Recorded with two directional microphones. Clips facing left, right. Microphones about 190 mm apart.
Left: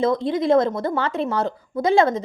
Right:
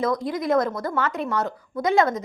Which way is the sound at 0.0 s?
25° left (ahead or behind).